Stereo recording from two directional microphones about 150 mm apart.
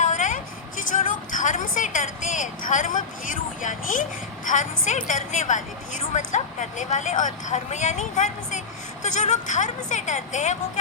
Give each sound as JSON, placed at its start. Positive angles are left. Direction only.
{"t": 0.0, "sound": "vehicle", "side_deg": 60}
{"t": 0.9, "sound": "a woman's voice", "side_deg": 60}